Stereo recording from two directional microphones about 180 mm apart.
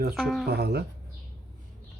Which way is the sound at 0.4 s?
60° right (ahead or behind).